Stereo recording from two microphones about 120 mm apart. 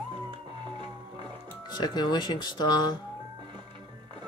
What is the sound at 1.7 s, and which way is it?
Speech, 35° left (ahead or behind).